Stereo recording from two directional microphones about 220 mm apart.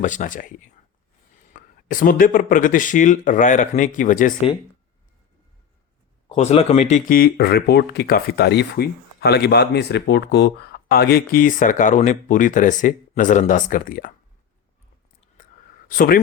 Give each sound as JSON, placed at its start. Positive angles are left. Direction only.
{"t": 0.0, "sound": "speech", "side_deg": 35}
{"t": 6.2, "sound": "speech", "side_deg": 30}
{"t": 15.4, "sound": "whispering", "side_deg": 35}
{"t": 15.9, "sound": "speech", "side_deg": 40}